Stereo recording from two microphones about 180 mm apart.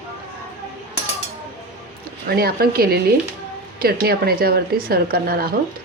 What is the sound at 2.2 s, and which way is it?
Speech, 60° right (ahead or behind).